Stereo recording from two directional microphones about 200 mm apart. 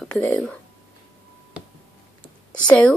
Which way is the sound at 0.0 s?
Centre (ahead or behind).